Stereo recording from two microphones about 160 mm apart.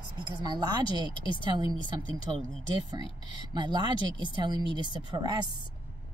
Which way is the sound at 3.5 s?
30° right (ahead or behind).